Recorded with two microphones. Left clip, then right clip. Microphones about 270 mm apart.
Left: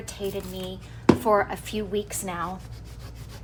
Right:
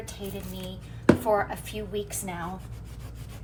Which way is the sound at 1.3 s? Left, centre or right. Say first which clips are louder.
Left 3 dB; left.